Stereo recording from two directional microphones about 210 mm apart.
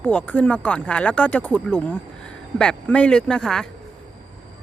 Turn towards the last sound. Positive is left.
turn(degrees=5)  # may be behind; listen again after turning